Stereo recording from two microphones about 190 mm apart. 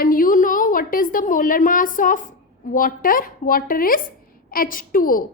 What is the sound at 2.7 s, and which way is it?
A woman's voice, 45° left (ahead or behind).